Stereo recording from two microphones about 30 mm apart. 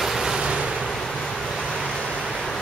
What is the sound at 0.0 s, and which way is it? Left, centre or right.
Waves, centre.